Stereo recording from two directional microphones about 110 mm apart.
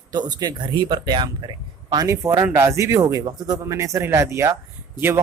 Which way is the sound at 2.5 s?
25° right (ahead or behind).